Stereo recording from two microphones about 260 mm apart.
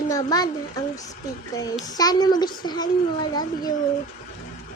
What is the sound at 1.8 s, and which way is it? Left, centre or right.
A woman's voice, centre.